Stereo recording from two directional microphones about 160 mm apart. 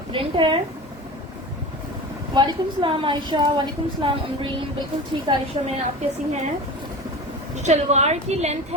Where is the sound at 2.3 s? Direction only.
25° right (ahead or behind).